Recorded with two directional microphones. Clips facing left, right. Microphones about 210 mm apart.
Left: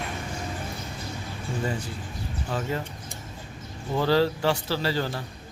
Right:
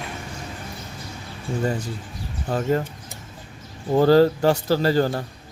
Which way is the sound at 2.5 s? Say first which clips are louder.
Right 8 dB; 45° right (ahead or behind).